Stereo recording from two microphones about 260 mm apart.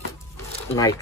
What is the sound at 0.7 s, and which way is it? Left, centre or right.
Speech, centre.